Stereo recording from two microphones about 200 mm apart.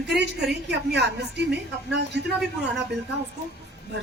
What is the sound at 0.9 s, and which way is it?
Speech, 55° right (ahead or behind).